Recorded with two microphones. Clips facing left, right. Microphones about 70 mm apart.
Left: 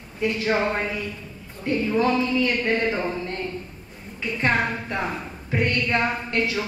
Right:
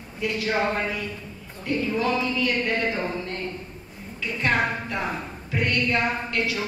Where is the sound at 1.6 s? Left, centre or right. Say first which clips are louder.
Left 3 dB; left.